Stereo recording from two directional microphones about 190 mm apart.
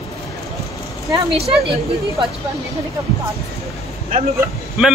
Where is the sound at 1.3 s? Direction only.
30° right (ahead or behind).